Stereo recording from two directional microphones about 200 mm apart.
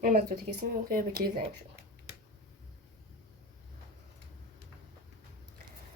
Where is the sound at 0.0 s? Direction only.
45° right (ahead or behind).